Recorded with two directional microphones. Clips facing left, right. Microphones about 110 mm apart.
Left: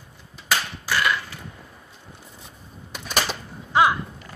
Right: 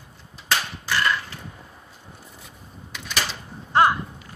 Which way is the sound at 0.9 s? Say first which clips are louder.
Even; 10° left (ahead or behind).